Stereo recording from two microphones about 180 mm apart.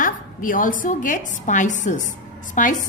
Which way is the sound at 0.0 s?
50° left (ahead or behind).